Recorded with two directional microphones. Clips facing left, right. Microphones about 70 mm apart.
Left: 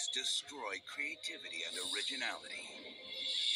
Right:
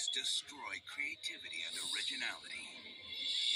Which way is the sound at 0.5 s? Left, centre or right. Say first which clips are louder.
Left 4 dB; centre.